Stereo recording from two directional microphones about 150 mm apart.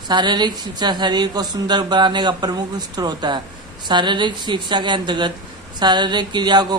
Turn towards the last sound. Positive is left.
turn(degrees=-30)  # may be behind; listen again after turning